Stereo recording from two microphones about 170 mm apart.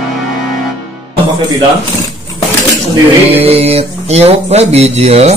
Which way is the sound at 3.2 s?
35° right (ahead or behind).